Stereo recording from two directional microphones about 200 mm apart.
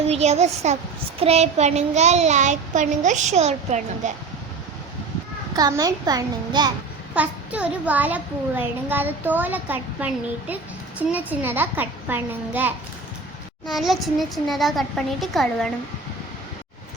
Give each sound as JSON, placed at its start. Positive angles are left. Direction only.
{"t": 0.1, "sound": "a child's voice", "side_deg": -30}
{"t": 5.5, "sound": "a child's voice", "side_deg": -20}
{"t": 7.1, "sound": "a child's voice", "side_deg": -5}